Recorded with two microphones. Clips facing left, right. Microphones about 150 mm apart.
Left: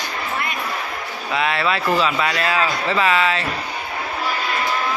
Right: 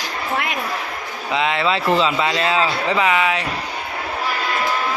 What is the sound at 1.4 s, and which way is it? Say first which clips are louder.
Speech: right 1 dB; 20° right (ahead or behind).